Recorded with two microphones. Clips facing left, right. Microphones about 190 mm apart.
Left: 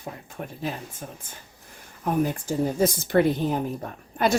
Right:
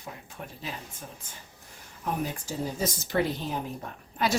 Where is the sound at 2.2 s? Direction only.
55° left (ahead or behind).